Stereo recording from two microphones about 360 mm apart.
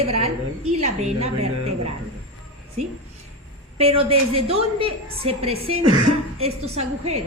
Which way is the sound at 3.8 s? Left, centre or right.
Centre.